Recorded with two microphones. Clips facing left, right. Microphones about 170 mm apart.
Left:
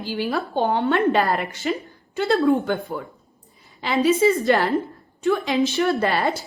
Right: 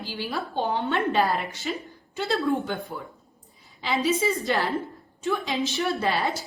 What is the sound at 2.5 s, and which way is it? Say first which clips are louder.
Speech: left 6 dB; 65° left (ahead or behind).